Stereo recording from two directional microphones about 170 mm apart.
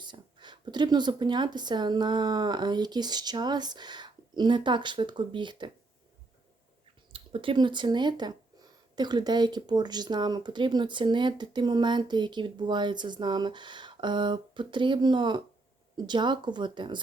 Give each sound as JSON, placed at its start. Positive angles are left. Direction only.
{"t": 0.0, "sound": "speech", "side_deg": -25}
{"t": 7.1, "sound": "speech", "side_deg": -30}